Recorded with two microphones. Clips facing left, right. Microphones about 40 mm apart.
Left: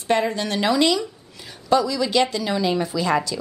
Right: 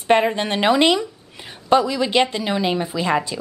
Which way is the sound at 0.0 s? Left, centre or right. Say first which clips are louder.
Right 4 dB; right.